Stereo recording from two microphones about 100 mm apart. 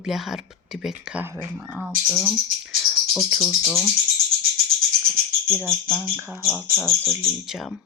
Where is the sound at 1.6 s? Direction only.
15° right (ahead or behind).